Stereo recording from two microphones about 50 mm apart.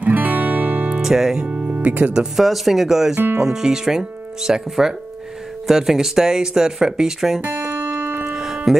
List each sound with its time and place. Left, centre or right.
0.0 s music: right
1.0 s speech: centre; by 2.1 s right
2.3 s speech: centre
7.4 s music: right
8.7 s speech: centre